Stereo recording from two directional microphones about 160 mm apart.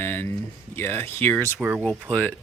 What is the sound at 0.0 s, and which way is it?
Speech, 10° left (ahead or behind).